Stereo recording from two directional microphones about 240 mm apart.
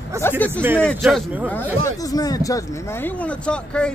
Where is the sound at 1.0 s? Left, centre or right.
Centre.